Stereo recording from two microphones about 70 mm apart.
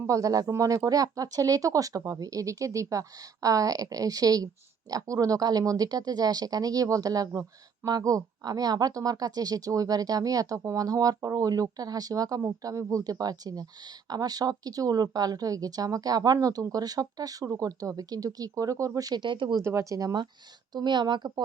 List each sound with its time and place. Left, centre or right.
0.1 s speech: right
12.6 s speech: right
13.1 s speech: right
19.6 s speech: right
20.7 s speech: right